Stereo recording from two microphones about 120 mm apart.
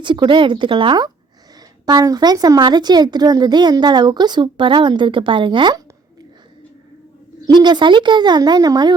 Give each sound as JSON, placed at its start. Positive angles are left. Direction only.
{"t": 0.0, "sound": "speech", "side_deg": -40}
{"t": 7.4, "sound": "speech", "side_deg": -40}